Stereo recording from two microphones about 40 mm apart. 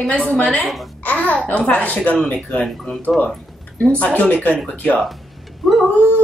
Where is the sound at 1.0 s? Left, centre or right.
Left.